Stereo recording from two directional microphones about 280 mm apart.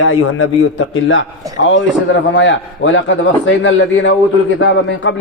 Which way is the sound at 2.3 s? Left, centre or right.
Left.